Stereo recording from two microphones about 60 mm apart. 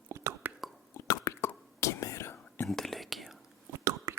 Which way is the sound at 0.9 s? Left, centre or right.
Left.